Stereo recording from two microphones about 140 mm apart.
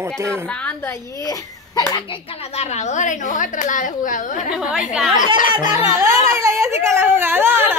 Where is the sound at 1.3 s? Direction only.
25° left (ahead or behind).